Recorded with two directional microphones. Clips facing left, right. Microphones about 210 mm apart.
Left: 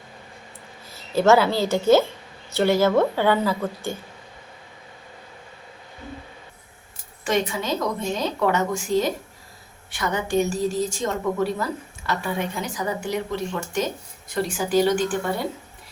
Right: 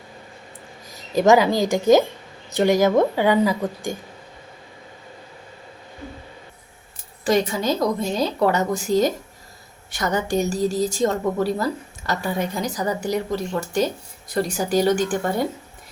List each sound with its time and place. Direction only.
0.9 s a woman's voice: 15° right (ahead or behind)
7.3 s a woman's voice: 40° right (ahead or behind)